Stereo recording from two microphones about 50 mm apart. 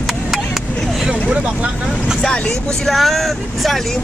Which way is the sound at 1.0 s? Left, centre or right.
Centre.